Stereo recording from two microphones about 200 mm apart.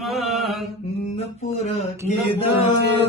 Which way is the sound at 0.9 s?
30° left (ahead or behind).